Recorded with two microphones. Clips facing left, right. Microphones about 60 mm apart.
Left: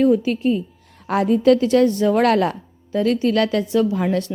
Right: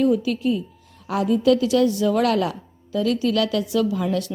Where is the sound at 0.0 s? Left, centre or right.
Left.